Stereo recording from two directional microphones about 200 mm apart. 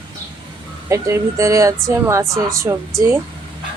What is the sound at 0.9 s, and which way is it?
A woman's voice, 15° right (ahead or behind).